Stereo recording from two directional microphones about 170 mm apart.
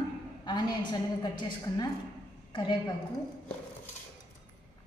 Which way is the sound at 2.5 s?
25° left (ahead or behind).